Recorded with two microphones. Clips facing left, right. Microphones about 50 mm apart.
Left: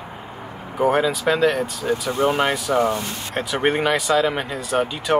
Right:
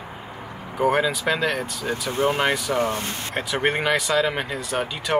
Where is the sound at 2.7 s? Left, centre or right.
Left.